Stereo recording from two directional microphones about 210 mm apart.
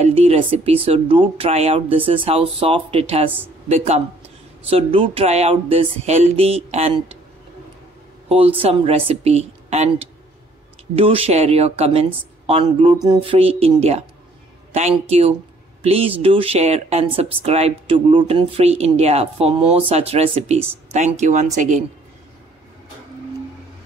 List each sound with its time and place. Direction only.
0.0 s speech: 30° right (ahead or behind)
8.3 s speech: 25° right (ahead or behind)
11.0 s speech: 25° right (ahead or behind)